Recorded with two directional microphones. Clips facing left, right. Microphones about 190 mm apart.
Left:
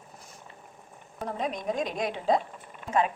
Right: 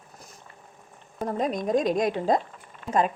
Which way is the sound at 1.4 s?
40° right (ahead or behind).